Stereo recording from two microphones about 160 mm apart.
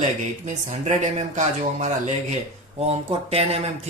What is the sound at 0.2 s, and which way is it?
Speech, 45° right (ahead or behind).